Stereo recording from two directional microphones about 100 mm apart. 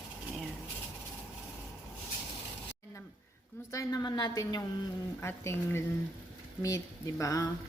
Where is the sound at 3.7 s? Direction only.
35° left (ahead or behind).